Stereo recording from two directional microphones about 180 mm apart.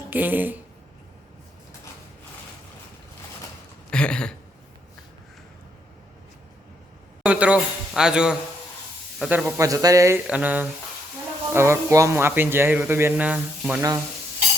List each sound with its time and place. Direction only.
0.1 s speech: 10° right (ahead or behind)
3.9 s a sound: 5° left (ahead or behind)
7.2 s a man's voice: 5° right (ahead or behind)
9.6 s speech: 20° right (ahead or behind)
10.2 s speech: 5° right (ahead or behind)